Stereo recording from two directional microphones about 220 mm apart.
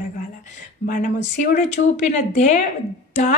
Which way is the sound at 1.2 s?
35° left (ahead or behind).